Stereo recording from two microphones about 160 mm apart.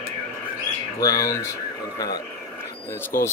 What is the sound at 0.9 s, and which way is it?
Speech, 20° left (ahead or behind).